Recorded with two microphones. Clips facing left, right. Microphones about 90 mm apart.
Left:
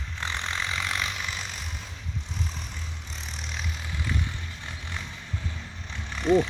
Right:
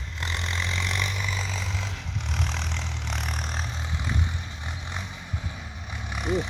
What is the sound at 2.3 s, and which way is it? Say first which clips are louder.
Vehicle: right 6 dB; 75° right (ahead or behind).